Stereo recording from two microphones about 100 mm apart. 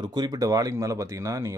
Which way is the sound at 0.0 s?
45° right (ahead or behind).